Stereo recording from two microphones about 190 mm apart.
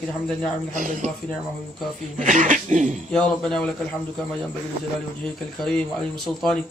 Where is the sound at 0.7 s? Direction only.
45° right (ahead or behind).